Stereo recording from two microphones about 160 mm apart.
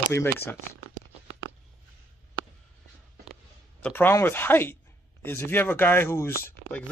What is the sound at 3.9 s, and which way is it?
Speech, 15° left (ahead or behind).